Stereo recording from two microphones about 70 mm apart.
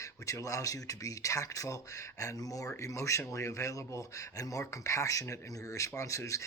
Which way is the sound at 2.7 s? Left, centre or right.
Left.